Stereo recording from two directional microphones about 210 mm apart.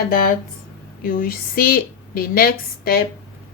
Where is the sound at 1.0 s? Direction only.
45° left (ahead or behind).